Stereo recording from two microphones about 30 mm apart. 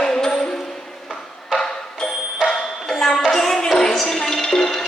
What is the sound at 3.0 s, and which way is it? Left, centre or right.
Music, centre.